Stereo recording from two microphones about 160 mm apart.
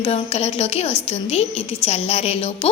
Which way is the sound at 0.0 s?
40° left (ahead or behind).